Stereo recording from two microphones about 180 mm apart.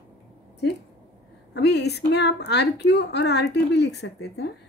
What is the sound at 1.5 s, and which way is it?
A woman's voice, 70° left (ahead or behind).